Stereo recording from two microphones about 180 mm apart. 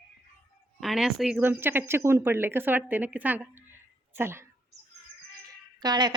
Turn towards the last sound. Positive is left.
turn(degrees=-25)  # may be behind; listen again after turning